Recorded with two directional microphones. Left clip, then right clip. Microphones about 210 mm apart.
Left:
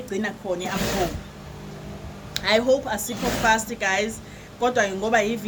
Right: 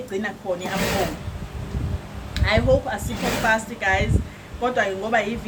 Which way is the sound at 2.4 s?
55° left (ahead or behind).